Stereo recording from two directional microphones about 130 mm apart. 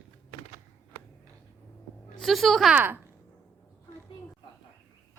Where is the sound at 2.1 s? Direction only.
Centre (ahead or behind).